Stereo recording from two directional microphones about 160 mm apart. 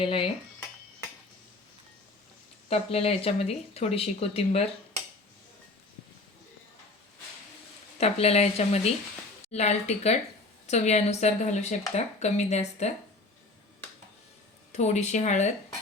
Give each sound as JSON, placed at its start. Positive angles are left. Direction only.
{"t": 0.0, "sound": "speech", "side_deg": 35}
{"t": 2.6, "sound": "speech", "side_deg": 40}
{"t": 7.9, "sound": "speech", "side_deg": 40}
{"t": 14.7, "sound": "speech", "side_deg": 45}